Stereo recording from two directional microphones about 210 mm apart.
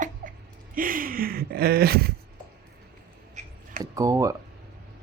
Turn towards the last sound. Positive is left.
turn(degrees=-15)  # may be behind; listen again after turning